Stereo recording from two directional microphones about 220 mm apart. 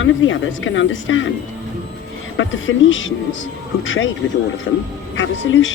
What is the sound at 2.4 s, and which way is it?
Speech, 60° left (ahead or behind).